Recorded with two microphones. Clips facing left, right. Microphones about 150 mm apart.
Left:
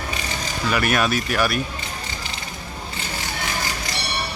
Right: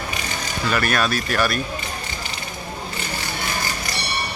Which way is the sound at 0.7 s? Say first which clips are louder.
Left 1 dB; 15° left (ahead or behind).